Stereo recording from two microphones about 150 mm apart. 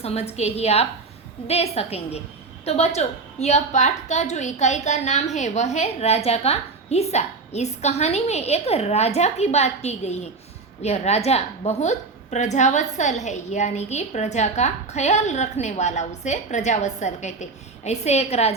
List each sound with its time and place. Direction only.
0.0 s a woman's voice: 45° left (ahead or behind)